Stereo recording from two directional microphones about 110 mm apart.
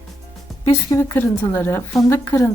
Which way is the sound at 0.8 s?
25° left (ahead or behind).